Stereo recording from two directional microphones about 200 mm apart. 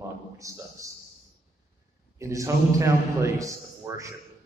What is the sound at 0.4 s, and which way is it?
Speech, 15° right (ahead or behind).